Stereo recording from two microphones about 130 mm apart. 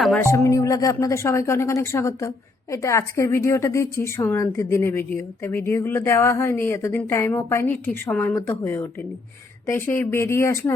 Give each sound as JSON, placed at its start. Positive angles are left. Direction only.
{"t": 0.2, "sound": "speech", "side_deg": 20}